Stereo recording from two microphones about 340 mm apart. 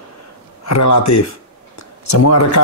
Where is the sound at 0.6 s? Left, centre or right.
Left.